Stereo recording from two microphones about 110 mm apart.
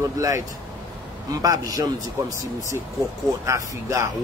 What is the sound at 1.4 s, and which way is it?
A man's voice, 30° right (ahead or behind).